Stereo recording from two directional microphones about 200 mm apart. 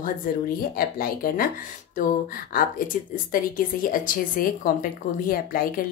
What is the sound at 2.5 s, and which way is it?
A woman's voice, 45° left (ahead or behind).